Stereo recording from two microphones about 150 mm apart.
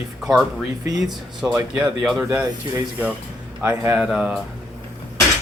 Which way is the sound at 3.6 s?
10° right (ahead or behind).